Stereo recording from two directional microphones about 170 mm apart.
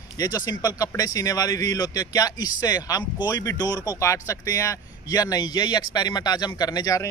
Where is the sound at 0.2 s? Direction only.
20° left (ahead or behind).